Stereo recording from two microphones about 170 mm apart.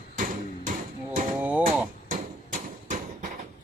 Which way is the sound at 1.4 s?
10° right (ahead or behind).